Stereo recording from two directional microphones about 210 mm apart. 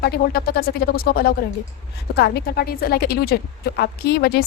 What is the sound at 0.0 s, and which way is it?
A woman's voice, 45° left (ahead or behind).